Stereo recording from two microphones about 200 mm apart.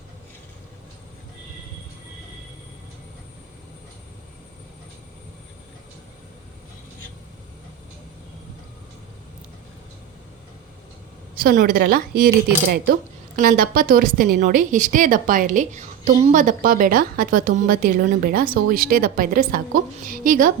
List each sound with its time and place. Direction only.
11.4 s a woman's voice: 50° right (ahead or behind)